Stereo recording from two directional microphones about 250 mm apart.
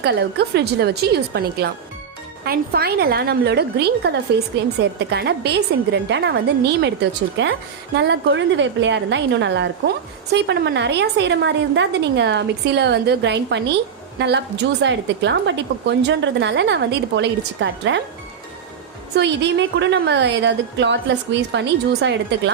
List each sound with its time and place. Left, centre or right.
0.0 s a woman's voice: right
19.1 s a woman's voice: right